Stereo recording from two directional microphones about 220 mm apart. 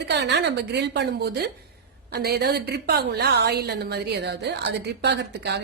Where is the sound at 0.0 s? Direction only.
50° right (ahead or behind).